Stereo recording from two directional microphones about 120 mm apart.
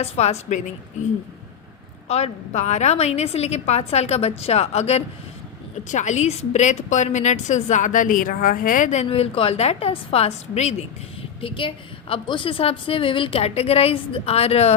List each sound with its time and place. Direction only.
0.0 s a woman's voice: 65° left (ahead or behind)
2.0 s a woman's voice: 65° left (ahead or behind)
5.9 s a woman's voice: 85° left
9.0 s a woman's voice: 55° left (ahead or behind)
11.3 s a woman's voice: 45° left (ahead or behind)